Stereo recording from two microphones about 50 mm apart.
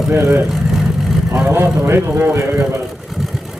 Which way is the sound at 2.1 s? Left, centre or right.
Right.